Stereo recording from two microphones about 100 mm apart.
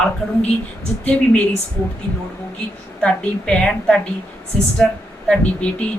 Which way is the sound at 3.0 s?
10° left (ahead or behind).